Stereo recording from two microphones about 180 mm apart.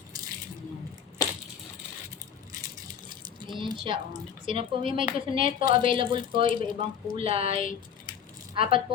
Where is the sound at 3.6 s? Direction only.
25° right (ahead or behind).